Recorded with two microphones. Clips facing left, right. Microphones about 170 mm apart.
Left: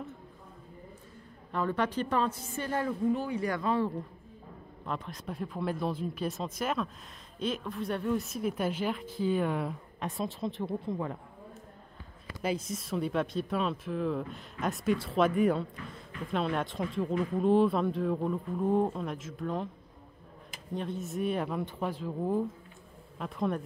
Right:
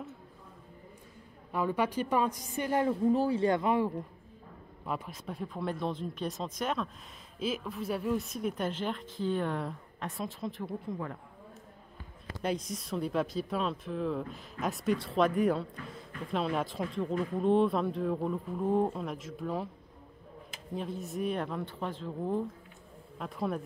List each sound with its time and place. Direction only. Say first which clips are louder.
1.5 s a woman's voice: even; 10° right (ahead or behind)
2.9 s speech: right 3 dB; 35° right (ahead or behind); by 3.9 s 15° right (ahead or behind)
4.8 s a woman's voice: even; 5° right (ahead or behind); by 11.1 s 25° left (ahead or behind)
12.4 s speech: left 1 dB; 5° left (ahead or behind)
20.7 s a woman's voice: left 1 dB; centre (ahead or behind)